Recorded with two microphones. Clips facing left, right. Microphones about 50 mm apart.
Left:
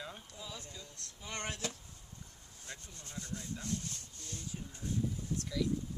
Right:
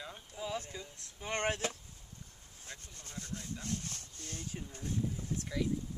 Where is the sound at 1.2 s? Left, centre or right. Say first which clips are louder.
Right 6 dB; right.